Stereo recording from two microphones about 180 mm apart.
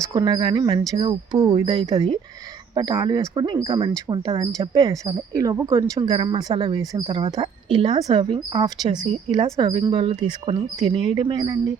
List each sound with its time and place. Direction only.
0.1 s speech: 25° right (ahead or behind)
7.9 s speech: 20° right (ahead or behind)